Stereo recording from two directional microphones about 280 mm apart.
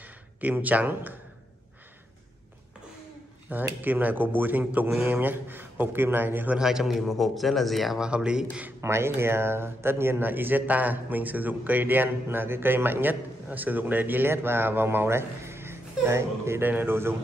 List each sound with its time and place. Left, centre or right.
0.0 s speech: centre
3.4 s speech: centre